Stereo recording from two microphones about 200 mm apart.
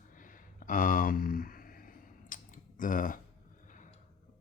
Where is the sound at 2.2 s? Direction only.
40° left (ahead or behind).